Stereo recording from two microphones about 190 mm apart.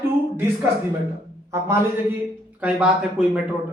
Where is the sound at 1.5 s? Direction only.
15° right (ahead or behind).